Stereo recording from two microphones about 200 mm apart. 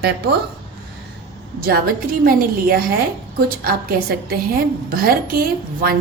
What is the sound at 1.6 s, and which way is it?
A woman's voice, 45° right (ahead or behind).